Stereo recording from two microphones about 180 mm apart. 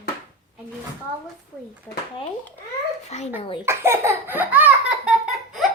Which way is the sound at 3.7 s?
15° right (ahead or behind).